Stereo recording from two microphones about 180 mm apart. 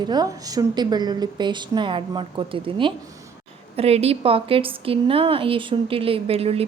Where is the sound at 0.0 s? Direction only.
20° right (ahead or behind).